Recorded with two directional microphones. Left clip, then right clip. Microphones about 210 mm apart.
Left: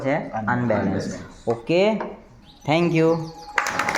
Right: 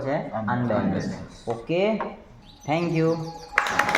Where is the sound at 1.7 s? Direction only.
50° left (ahead or behind).